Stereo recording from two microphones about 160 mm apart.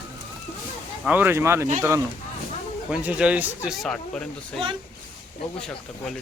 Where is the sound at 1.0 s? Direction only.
10° right (ahead or behind).